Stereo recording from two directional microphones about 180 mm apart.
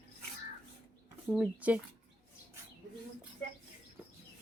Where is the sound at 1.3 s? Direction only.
10° right (ahead or behind).